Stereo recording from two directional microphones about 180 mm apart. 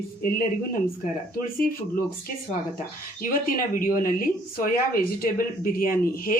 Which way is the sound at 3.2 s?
50° left (ahead or behind).